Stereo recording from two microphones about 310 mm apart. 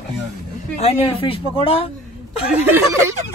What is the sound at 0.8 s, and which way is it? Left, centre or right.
Speech, centre.